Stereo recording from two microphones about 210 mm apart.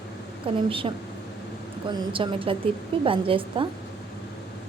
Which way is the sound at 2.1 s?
25° right (ahead or behind).